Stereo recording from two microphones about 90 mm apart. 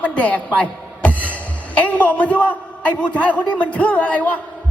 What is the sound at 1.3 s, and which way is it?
A man's voice, 15° left (ahead or behind).